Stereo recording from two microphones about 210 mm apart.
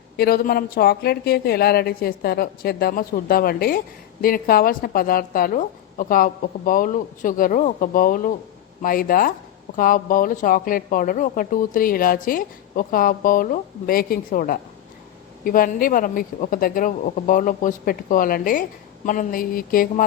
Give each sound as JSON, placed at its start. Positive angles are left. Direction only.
{"t": 0.2, "sound": "speech", "side_deg": 45}